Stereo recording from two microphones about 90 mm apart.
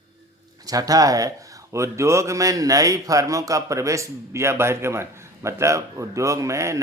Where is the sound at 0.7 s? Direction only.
45° right (ahead or behind).